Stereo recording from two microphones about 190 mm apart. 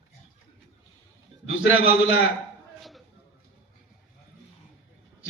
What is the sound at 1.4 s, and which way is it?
Speech, 90° left.